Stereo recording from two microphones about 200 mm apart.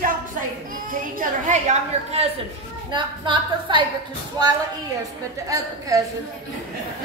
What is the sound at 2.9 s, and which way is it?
Speech, 25° right (ahead or behind).